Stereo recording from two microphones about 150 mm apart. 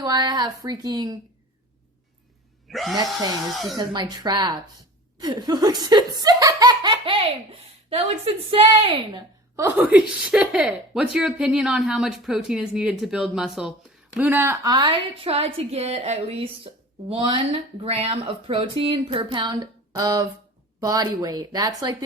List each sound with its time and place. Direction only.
0.0 s a woman's voice: 25° right (ahead or behind)
2.6 s a sound: centre (ahead or behind)
3.8 s speech: 30° right (ahead or behind)
9.1 s speech: 15° right (ahead or behind)
14.2 s speech: 15° right (ahead or behind)
15.2 s a woman's voice: 40° right (ahead or behind)
16.7 s a sound: 35° right (ahead or behind)
17.1 s speech: 35° right (ahead or behind)